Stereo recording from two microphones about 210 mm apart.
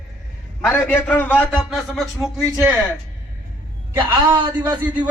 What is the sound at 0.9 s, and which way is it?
A man's voice, 5° left (ahead or behind).